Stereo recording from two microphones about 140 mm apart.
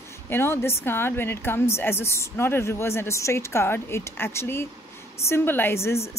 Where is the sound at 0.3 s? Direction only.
15° left (ahead or behind).